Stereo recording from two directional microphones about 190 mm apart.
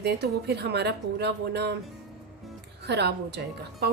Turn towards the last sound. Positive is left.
turn(degrees=-60)  # may be behind; listen again after turning